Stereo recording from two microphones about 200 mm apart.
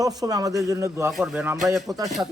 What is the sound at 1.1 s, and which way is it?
A man's voice, 5° right (ahead or behind).